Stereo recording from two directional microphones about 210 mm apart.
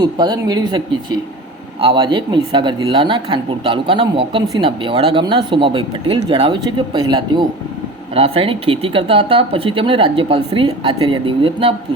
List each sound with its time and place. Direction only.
0.0 s speech: 20° right (ahead or behind)
1.8 s speech: 25° right (ahead or behind)
8.1 s speech: 30° right (ahead or behind)